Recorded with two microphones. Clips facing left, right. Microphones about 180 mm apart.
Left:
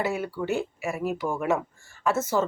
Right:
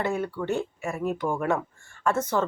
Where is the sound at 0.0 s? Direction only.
5° left (ahead or behind).